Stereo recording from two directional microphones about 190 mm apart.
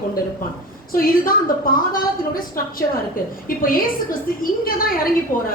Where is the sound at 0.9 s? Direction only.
50° left (ahead or behind).